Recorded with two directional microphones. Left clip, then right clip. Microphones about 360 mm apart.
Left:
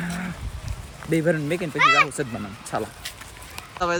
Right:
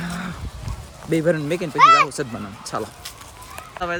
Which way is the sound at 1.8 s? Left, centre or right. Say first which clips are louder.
Right 5 dB; centre.